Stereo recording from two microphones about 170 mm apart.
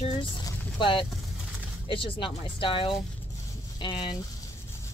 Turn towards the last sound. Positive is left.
turn(degrees=25)  # may be behind; listen again after turning